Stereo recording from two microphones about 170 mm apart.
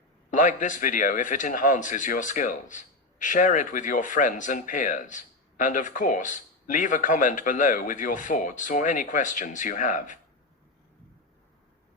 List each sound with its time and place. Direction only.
0.3 s speech: 50° left (ahead or behind)